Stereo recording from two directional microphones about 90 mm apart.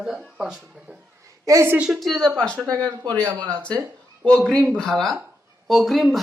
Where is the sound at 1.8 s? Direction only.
Centre (ahead or behind).